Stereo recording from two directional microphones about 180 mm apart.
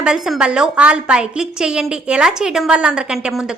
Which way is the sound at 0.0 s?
5° right (ahead or behind).